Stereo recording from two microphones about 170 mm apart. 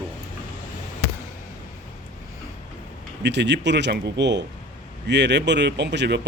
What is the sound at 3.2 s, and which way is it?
Speech, 90° right.